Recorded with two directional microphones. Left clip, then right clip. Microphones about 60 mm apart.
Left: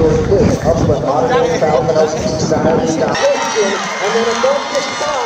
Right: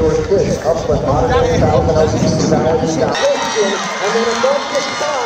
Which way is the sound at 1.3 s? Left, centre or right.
Centre.